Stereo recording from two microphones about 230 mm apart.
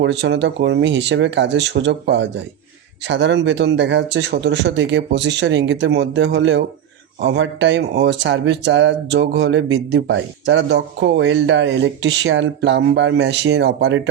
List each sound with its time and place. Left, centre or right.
0.0 s speech: right